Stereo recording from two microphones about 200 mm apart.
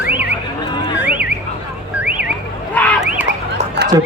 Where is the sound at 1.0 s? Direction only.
10° right (ahead or behind).